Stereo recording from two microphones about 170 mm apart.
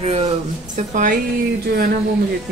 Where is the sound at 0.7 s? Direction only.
50° right (ahead or behind).